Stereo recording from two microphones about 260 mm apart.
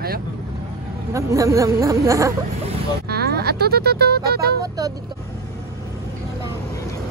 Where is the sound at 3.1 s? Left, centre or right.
Right.